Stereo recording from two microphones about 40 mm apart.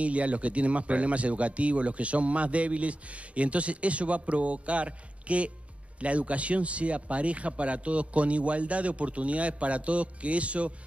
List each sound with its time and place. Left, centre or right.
0.0 s speech: right